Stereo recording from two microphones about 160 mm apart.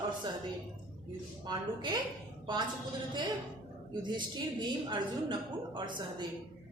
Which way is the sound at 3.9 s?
30° right (ahead or behind).